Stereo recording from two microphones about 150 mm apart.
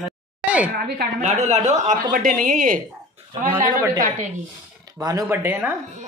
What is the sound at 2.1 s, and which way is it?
A woman's voice, 70° right (ahead or behind).